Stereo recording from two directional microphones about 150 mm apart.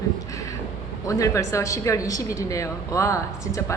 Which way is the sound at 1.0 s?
20° left (ahead or behind).